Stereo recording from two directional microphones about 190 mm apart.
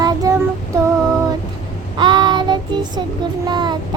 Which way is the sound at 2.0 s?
25° right (ahead or behind).